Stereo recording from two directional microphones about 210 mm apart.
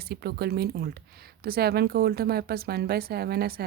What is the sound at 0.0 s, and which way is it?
Speech, 50° right (ahead or behind).